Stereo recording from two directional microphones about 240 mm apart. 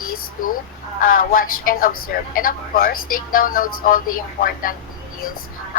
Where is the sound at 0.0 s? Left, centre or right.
Left.